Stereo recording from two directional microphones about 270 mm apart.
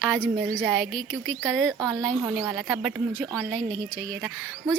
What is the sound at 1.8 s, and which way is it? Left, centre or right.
A woman's voice, centre.